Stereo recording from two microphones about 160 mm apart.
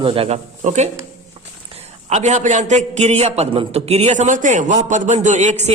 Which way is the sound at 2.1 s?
45° right (ahead or behind).